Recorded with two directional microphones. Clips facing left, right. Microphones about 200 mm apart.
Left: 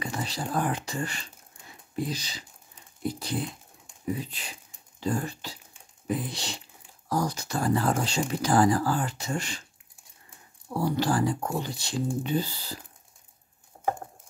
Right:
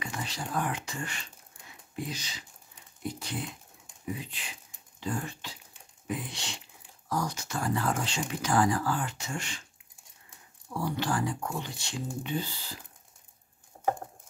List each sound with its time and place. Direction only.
0.0 s speech: 35° left (ahead or behind)
10.7 s speech: 40° left (ahead or behind)